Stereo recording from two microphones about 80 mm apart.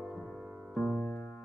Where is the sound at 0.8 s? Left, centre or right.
Centre.